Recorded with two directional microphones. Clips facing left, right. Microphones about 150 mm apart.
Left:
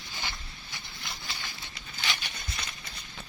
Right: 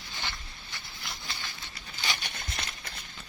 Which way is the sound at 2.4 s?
55° right (ahead or behind).